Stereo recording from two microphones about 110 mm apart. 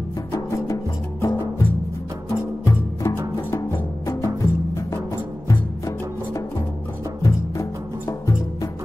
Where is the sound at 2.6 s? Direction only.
25° left (ahead or behind).